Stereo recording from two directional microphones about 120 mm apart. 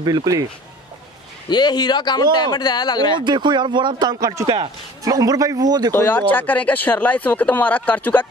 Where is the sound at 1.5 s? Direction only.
35° left (ahead or behind).